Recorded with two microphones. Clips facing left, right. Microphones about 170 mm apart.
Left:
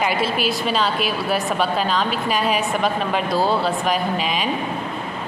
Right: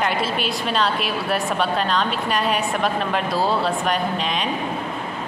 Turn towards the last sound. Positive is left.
turn(degrees=5)  # may be behind; listen again after turning